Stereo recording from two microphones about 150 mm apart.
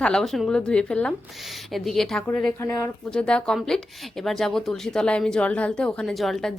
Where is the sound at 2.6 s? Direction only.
20° left (ahead or behind).